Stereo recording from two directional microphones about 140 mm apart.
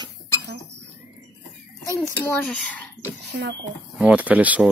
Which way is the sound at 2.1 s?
15° left (ahead or behind).